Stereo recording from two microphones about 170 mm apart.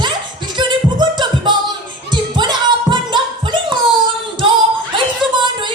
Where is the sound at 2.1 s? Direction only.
25° right (ahead or behind).